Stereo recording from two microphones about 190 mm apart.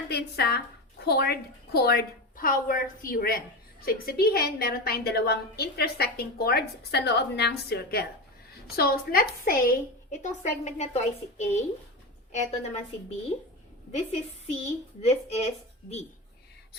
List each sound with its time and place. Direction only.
0.1 s a woman's voice: 60° left (ahead or behind); by 12.8 s 35° left (ahead or behind)
13.9 s a woman's voice: 35° left (ahead or behind)